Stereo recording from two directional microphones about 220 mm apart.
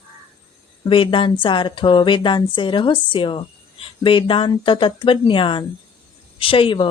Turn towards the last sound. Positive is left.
turn(degrees=25)  # may be behind; listen again after turning